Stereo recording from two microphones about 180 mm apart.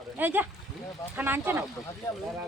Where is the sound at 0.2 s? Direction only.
10° right (ahead or behind).